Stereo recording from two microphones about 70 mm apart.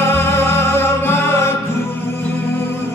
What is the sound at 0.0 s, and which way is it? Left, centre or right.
Music, left.